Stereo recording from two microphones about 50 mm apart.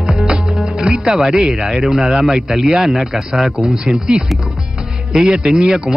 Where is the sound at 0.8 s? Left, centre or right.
Centre.